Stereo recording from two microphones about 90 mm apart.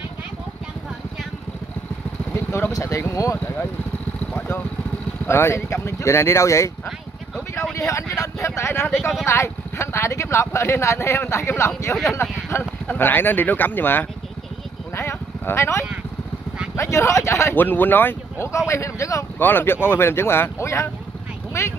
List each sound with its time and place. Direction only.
2.3 s speech: 30° left (ahead or behind)
5.3 s speech: 30° left (ahead or behind)
7.7 s speech: 35° left (ahead or behind)
15.0 s a sound: 30° left (ahead or behind)
16.7 s speech: 30° left (ahead or behind)
19.4 s speech: 25° left (ahead or behind)